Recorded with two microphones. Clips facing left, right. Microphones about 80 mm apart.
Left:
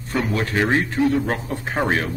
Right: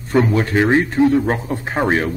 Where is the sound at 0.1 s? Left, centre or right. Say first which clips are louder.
Right 7 dB; right.